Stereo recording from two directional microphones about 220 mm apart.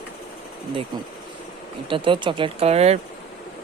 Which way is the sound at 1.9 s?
20° right (ahead or behind).